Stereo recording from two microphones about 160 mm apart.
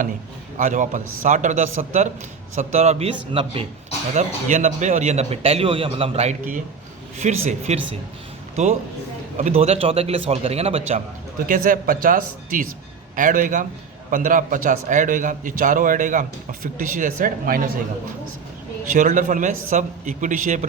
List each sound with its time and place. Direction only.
0.5 s a man's voice: 50° right (ahead or behind); by 3.7 s 35° right (ahead or behind)
4.1 s a man's voice: 45° right (ahead or behind)
11.4 s a man's voice: 55° right (ahead or behind)
18.9 s a man's voice: 50° right (ahead or behind)